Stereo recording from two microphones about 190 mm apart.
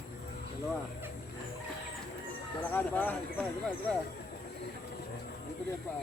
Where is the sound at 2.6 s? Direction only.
10° left (ahead or behind).